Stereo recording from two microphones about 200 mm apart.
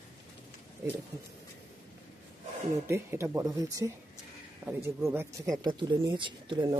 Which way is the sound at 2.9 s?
15° right (ahead or behind).